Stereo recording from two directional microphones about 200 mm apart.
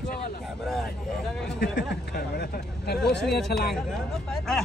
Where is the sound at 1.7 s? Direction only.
50° left (ahead or behind).